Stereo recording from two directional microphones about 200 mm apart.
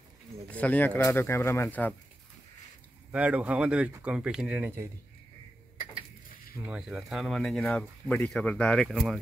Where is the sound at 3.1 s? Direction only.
5° right (ahead or behind).